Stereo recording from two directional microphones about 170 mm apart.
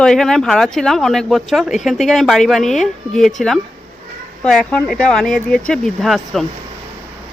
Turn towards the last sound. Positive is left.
turn(degrees=0)  # may be behind; listen again after turning